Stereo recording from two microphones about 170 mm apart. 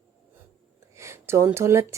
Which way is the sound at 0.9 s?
15° right (ahead or behind).